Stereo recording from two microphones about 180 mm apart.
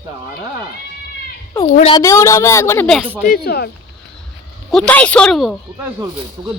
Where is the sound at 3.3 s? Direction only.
65° left (ahead or behind).